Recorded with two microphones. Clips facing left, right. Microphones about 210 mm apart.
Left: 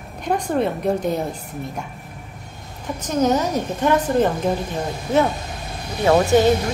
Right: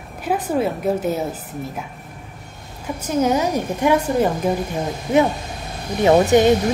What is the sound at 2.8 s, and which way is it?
A woman's voice, 10° right (ahead or behind).